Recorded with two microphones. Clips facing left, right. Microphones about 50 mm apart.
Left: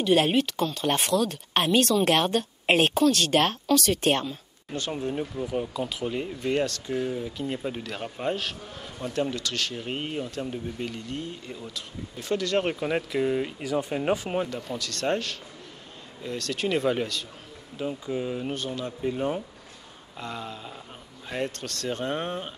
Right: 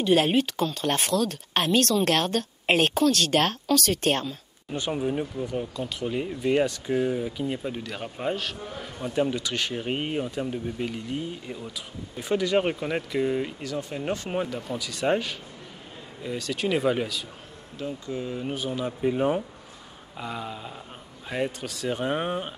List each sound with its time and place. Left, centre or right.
0.0 s speech: centre
4.7 s speech: centre
5.3 s speech: centre
7.4 s speech: centre
12.7 s speech: centre
13.7 s speech: centre
14.2 s speech: centre
17.7 s speech: centre
18.5 s speech: centre